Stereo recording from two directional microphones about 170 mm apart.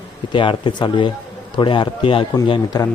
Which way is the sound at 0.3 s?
30° left (ahead or behind).